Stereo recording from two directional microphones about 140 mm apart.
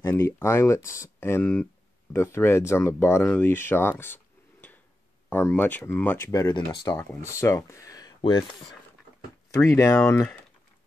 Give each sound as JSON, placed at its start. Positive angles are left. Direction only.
{"t": 0.0, "sound": "speech", "side_deg": 20}
{"t": 6.5, "sound": "speech", "side_deg": 30}
{"t": 7.0, "sound": "speech", "side_deg": 20}
{"t": 9.6, "sound": "speech", "side_deg": 20}